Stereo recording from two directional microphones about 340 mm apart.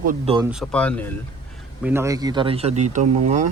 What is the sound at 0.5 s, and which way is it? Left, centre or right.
Speech, centre.